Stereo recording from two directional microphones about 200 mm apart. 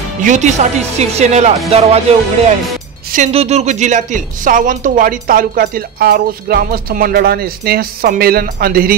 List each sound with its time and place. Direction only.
0.2 s a woman's voice: 35° right (ahead or behind)